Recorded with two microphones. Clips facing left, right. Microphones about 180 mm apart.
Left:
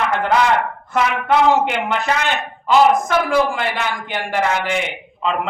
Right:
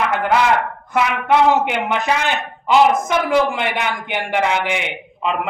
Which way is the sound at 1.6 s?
15° right (ahead or behind).